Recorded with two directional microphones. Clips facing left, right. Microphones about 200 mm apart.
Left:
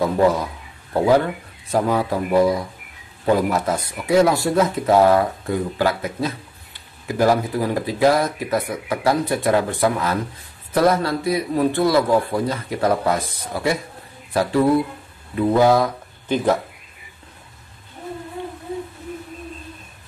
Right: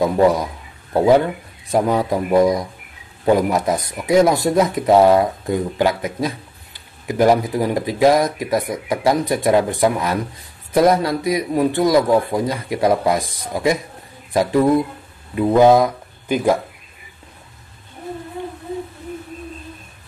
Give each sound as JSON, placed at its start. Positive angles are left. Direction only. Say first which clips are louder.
{"t": 0.0, "sound": "a man's voice", "louder": "right 2 dB", "side_deg": -15}